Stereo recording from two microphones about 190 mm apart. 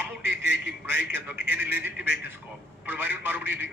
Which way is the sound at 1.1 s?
10° right (ahead or behind).